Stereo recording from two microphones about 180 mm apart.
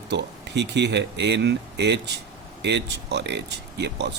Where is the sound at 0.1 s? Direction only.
70° right (ahead or behind).